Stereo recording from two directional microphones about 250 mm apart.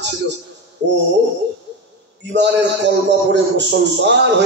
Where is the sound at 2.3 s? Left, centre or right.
Right.